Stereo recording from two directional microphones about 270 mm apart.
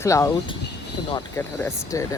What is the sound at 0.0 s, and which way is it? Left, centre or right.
Speech, centre.